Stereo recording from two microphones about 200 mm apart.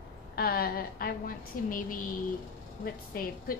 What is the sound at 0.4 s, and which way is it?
A woman's voice, 50° left (ahead or behind).